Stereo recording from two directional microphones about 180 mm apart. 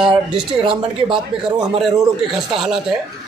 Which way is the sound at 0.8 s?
25° right (ahead or behind).